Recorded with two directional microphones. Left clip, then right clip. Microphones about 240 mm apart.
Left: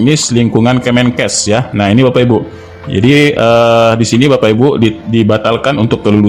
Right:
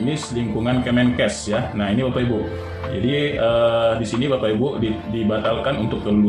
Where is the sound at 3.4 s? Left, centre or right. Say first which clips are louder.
Left 6 dB; left.